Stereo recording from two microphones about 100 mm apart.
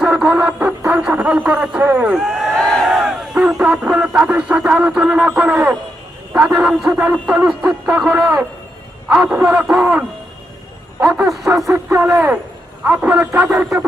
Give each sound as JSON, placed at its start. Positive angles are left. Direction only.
{"t": 0.0, "sound": "music", "side_deg": -5}
{"t": 1.9, "sound": "a man's voice", "side_deg": -15}
{"t": 2.1, "sound": "speech", "side_deg": -5}
{"t": 6.3, "sound": "a man's voice", "side_deg": -5}
{"t": 11.7, "sound": "speech", "side_deg": -25}
{"t": 12.8, "sound": "a man's voice", "side_deg": -10}